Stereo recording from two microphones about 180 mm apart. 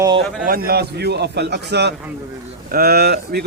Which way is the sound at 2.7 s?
55° right (ahead or behind).